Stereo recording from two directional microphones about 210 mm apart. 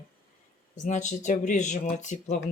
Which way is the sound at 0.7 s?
35° left (ahead or behind).